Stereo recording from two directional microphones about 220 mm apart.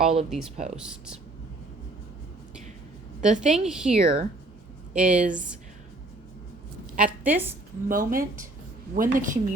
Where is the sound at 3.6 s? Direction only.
5° right (ahead or behind).